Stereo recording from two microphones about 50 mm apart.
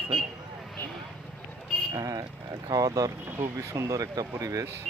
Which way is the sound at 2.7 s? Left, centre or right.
Right.